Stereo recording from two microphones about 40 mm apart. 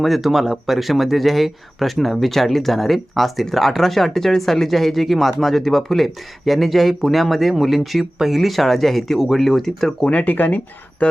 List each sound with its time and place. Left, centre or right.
0.0 s speech: centre
10.1 s speech: left
11.0 s speech: left